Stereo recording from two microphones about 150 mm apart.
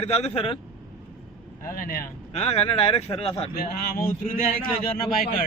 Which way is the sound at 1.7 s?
70° left (ahead or behind).